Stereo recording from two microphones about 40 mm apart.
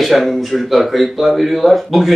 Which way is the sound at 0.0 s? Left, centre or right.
Centre.